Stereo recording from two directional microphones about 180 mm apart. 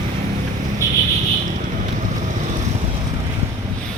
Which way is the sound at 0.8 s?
15° left (ahead or behind).